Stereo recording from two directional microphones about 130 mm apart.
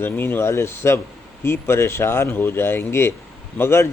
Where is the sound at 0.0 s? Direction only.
15° left (ahead or behind).